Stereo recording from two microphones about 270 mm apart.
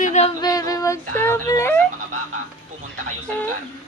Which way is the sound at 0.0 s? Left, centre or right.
Left.